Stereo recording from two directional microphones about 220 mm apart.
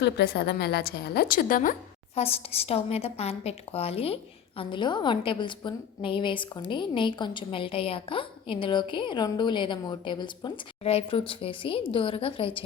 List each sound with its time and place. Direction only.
0.0 s a woman's voice: 50° left (ahead or behind)
2.1 s a woman's voice: 25° left (ahead or behind)